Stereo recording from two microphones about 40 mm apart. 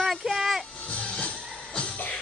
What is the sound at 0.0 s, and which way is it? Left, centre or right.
Music, centre.